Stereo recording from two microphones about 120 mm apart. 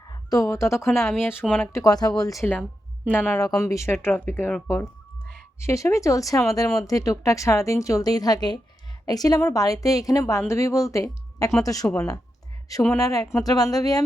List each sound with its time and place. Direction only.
0.1 s a woman's voice: 30° left (ahead or behind)
3.1 s a woman's voice: 15° left (ahead or behind)
5.6 s speech: 25° left (ahead or behind)